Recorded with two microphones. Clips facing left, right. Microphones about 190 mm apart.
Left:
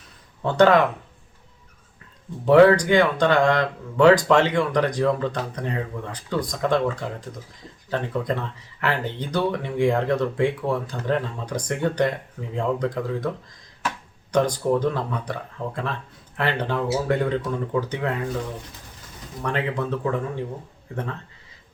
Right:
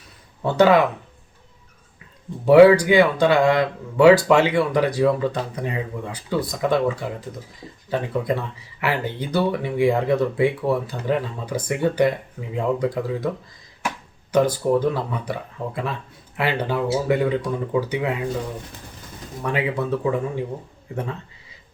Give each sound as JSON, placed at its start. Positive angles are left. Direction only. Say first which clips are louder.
{"t": 0.4, "sound": "speech", "louder": "right 1 dB", "side_deg": -5}
{"t": 2.4, "sound": "speech", "louder": "right 3 dB", "side_deg": -10}
{"t": 14.3, "sound": "speech", "louder": "right 2 dB", "side_deg": -5}
{"t": 19.4, "sound": "speech", "louder": "right 2 dB", "side_deg": -10}